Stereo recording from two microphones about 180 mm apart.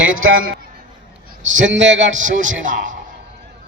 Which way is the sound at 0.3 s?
55° right (ahead or behind).